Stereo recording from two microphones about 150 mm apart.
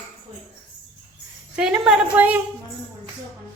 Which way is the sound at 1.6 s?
5° right (ahead or behind).